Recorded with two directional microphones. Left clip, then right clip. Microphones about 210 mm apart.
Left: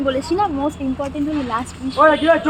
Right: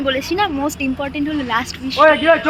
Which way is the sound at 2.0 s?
25° right (ahead or behind).